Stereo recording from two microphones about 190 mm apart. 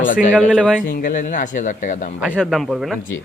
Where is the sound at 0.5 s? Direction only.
5° left (ahead or behind).